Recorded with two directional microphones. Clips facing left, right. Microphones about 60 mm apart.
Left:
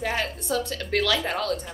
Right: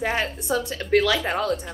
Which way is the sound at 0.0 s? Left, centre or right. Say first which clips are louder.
Right 3 dB; centre.